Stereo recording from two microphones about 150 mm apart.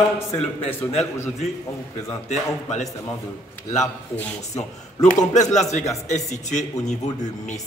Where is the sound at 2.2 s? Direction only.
50° left (ahead or behind).